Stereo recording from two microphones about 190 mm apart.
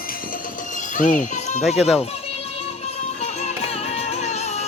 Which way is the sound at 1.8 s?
Centre (ahead or behind).